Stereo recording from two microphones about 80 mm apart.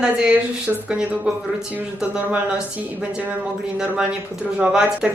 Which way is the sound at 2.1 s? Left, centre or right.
Centre.